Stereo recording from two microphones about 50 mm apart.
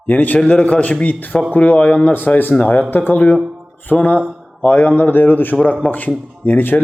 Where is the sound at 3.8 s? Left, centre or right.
Left.